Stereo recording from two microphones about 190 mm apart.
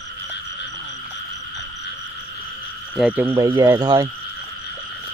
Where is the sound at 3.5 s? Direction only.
20° right (ahead or behind).